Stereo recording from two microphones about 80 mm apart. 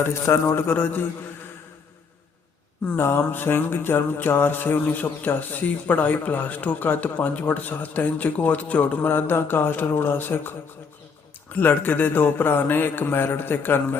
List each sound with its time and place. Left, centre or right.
0.0 s a man's voice: left
0.5 s music: left
3.0 s music: left
11.5 s music: left